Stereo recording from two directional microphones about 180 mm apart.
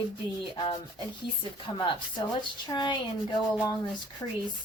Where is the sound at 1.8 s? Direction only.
25° left (ahead or behind).